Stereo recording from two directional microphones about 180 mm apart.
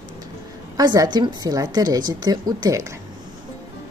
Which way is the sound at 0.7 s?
20° right (ahead or behind).